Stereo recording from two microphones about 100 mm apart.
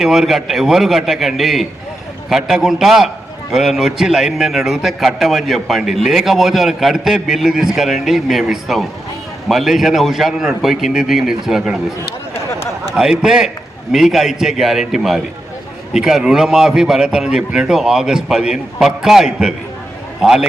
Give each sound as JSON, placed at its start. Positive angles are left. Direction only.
{"t": 0.0, "sound": "a man's voice", "side_deg": 0}
{"t": 12.3, "sound": "a sound", "side_deg": 25}
{"t": 13.0, "sound": "a man's voice", "side_deg": -5}